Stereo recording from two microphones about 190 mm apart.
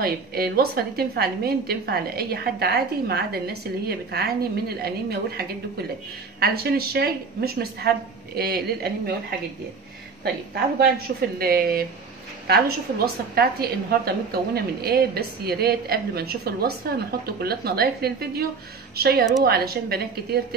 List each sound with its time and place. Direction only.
0.0 s a woman's voice: 55° right (ahead or behind)
10.2 s a woman's voice: 60° right (ahead or behind)